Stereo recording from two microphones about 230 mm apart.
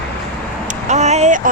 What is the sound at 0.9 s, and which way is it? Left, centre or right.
Vehicle, right.